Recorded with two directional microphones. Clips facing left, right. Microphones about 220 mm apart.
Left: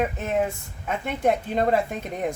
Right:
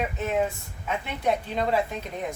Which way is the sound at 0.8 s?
50° left (ahead or behind).